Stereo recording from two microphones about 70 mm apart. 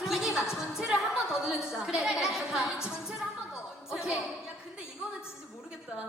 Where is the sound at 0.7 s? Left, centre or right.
Centre.